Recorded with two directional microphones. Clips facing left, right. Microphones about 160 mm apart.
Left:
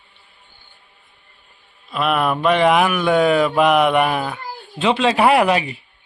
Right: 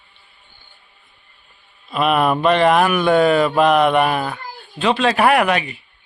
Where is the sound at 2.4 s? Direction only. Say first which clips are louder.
Left 1 dB; 10° left (ahead or behind).